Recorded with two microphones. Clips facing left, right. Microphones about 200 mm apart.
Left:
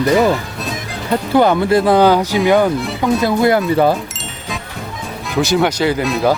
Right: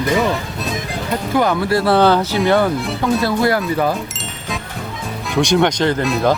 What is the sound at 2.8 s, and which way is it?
Speech, centre (ahead or behind).